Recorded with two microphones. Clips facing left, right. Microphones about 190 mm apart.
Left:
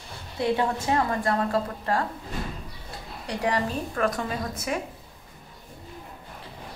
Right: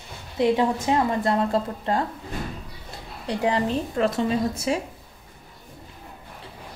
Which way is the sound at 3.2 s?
25° right (ahead or behind).